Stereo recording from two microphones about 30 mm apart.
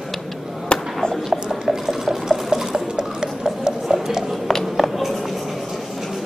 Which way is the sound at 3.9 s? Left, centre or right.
Centre.